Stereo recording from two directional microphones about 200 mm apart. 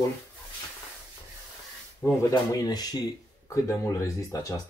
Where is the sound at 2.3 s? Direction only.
20° left (ahead or behind).